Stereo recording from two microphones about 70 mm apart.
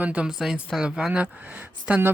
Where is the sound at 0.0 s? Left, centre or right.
Centre.